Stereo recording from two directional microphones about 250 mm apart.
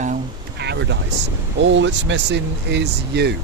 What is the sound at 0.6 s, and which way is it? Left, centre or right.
Speech, right.